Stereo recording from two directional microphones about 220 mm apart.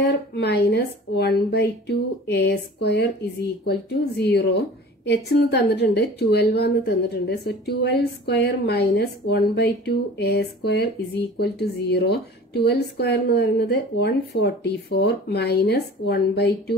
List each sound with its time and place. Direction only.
0.4 s a woman's voice: 50° left (ahead or behind)